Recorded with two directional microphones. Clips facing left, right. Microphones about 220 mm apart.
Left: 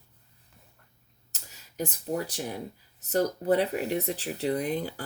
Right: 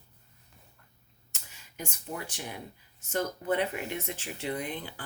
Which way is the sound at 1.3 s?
40° left (ahead or behind).